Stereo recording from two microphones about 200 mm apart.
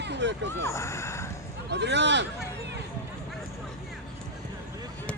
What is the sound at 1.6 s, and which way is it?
Speech, 60° right (ahead or behind).